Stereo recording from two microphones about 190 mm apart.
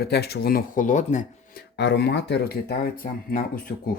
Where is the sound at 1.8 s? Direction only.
65° left (ahead or behind).